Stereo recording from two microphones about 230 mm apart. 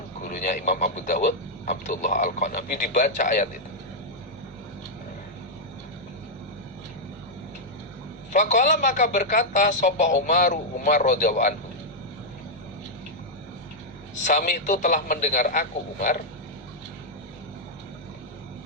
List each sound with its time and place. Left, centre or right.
0.2 s a man's voice: left
8.3 s a man's voice: left
14.3 s a man's voice: left